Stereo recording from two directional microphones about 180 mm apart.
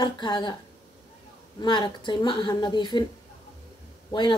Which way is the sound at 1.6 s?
25° left (ahead or behind).